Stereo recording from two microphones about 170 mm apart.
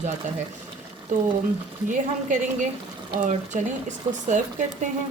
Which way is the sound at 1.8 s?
50° right (ahead or behind).